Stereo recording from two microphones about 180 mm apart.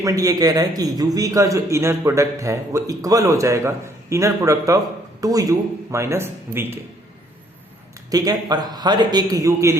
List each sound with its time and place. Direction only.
0.0 s a man's voice: 20° right (ahead or behind)
8.1 s a man's voice: 20° right (ahead or behind)